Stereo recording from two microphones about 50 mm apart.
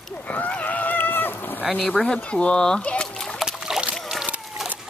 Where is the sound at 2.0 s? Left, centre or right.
Centre.